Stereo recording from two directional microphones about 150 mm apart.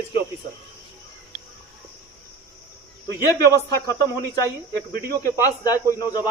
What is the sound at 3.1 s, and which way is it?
Speech, 25° left (ahead or behind).